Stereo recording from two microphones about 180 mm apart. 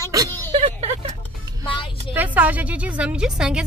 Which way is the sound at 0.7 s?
30° right (ahead or behind).